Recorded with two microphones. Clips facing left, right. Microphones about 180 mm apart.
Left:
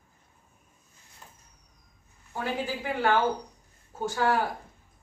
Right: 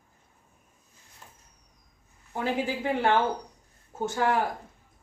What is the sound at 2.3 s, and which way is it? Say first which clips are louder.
Speech: right 3 dB; 25° right (ahead or behind).